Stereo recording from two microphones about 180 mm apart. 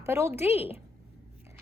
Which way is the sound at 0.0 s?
15° right (ahead or behind).